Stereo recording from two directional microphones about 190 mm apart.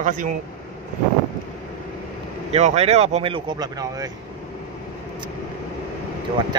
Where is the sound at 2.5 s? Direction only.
35° right (ahead or behind).